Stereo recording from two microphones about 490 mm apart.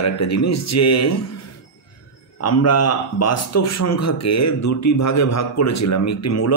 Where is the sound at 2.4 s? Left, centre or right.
Left.